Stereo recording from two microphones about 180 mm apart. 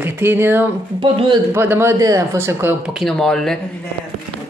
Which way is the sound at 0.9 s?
25° right (ahead or behind).